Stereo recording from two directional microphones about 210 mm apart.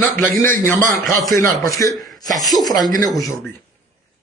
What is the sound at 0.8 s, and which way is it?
Speech, 40° right (ahead or behind).